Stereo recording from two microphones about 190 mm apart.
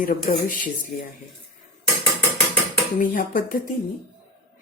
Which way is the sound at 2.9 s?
45° left (ahead or behind).